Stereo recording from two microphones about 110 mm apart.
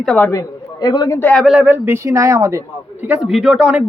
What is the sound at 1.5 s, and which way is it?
Speech, 10° right (ahead or behind).